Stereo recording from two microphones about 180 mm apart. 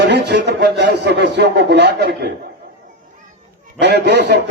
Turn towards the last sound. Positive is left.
turn(degrees=-65)  # may be behind; listen again after turning